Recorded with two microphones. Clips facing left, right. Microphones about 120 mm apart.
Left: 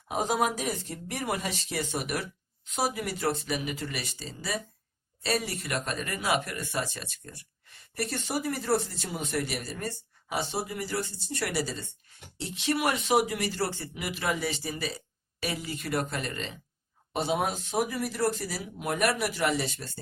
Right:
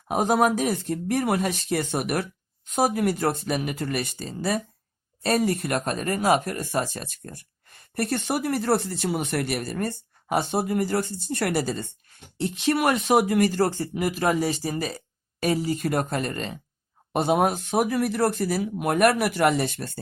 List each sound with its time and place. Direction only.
0.1 s speech: 60° right (ahead or behind)